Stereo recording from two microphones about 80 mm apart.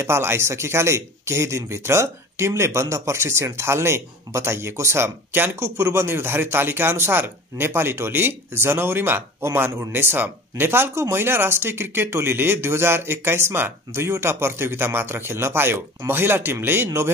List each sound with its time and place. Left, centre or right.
0.0 s speech: right